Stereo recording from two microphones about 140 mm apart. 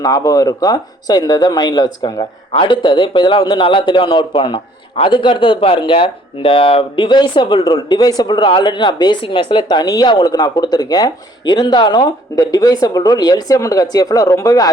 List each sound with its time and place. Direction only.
0.0 s speech: 25° left (ahead or behind)